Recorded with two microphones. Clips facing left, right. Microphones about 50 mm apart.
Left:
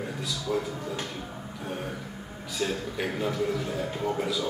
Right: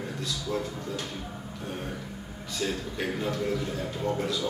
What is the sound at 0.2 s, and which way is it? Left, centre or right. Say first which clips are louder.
Speech: left 2 dB; centre.